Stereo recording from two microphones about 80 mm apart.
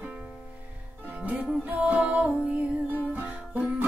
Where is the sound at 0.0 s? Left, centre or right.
Centre.